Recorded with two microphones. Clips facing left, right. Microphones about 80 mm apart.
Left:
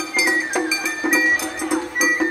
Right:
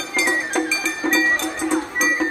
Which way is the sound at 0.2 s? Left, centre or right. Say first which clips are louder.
Even; centre.